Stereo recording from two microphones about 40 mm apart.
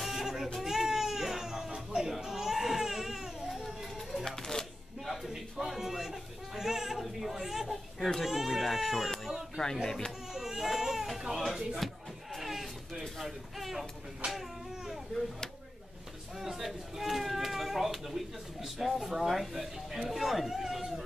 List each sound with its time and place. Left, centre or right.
0.0 s a sound: centre
0.6 s baby cry: centre
4.4 s shuffling cards: centre
5.0 s baby cry: centre
8.0 s speech: centre
8.3 s baby cry: centre
9.2 s a sound: centre
9.8 s speech: centre
10.3 s baby cry: centre
11.4 s speech: centre
12.4 s a sound: centre
14.2 s baby cry: right
16.3 s a sound: centre